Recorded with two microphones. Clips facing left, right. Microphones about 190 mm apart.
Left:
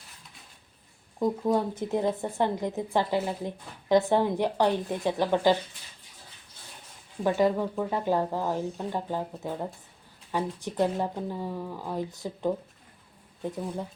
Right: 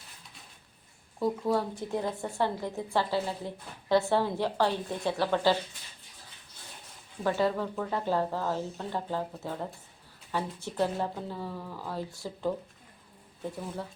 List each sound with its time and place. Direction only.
1.2 s speech: 20° left (ahead or behind)
7.3 s speech: 15° left (ahead or behind)